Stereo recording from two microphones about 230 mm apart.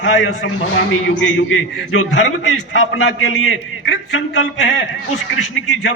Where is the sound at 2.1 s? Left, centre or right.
Left.